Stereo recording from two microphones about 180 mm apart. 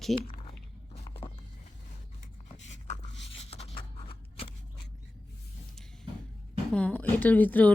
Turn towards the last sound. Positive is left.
turn(degrees=10)  # may be behind; listen again after turning